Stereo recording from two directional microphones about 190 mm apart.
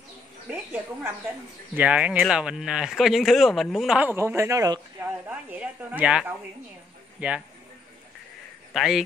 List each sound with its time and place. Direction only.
1.8 s speech: 5° right (ahead or behind)
8.7 s speech: centre (ahead or behind)